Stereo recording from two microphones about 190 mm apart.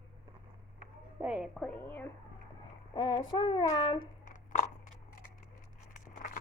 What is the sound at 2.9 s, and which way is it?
Child singing, 25° left (ahead or behind).